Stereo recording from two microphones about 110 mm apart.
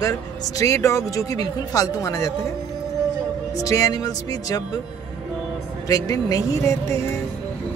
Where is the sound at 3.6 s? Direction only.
30° left (ahead or behind).